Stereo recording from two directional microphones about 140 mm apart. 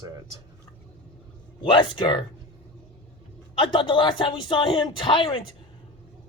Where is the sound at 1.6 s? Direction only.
35° left (ahead or behind).